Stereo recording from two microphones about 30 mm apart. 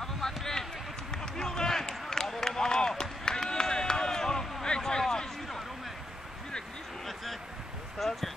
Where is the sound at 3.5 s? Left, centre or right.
Left.